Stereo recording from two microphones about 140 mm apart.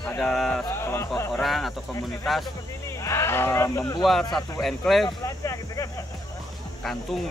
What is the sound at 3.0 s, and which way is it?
Speech, 20° left (ahead or behind).